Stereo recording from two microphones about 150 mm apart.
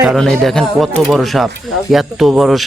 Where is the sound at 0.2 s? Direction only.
5° left (ahead or behind).